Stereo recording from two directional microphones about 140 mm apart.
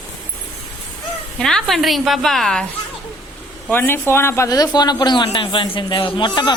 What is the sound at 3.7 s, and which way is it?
A woman's voice, 15° left (ahead or behind).